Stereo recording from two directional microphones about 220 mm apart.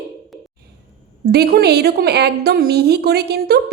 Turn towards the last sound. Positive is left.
turn(degrees=-45)  # may be behind; listen again after turning